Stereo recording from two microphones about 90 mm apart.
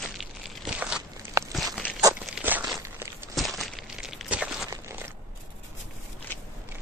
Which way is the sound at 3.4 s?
Centre (ahead or behind).